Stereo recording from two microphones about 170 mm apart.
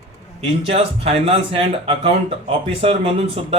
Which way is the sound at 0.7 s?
35° right (ahead or behind).